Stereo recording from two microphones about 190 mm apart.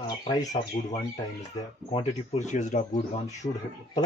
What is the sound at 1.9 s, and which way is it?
Speech, 35° left (ahead or behind).